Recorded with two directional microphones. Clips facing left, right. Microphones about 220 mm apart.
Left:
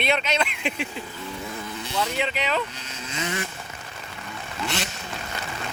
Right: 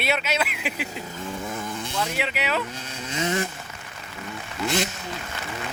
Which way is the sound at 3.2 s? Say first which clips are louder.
Right 5 dB; 30° right (ahead or behind).